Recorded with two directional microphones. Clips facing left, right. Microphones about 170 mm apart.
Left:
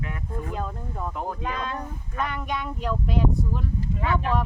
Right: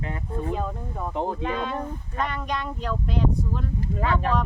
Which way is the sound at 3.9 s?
40° right (ahead or behind).